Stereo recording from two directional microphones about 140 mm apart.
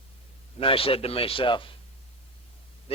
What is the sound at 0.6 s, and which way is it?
Speech, 40° left (ahead or behind).